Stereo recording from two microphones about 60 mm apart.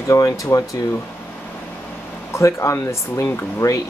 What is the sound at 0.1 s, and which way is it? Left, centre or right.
Speech, left.